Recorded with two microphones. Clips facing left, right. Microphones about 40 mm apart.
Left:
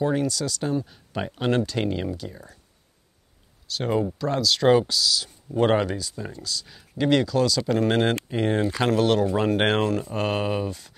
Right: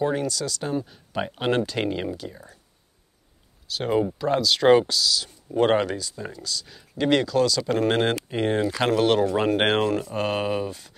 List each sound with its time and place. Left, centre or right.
0.1 s speech: centre
3.6 s speech: centre
4.0 s speech: centre
4.8 s speech: centre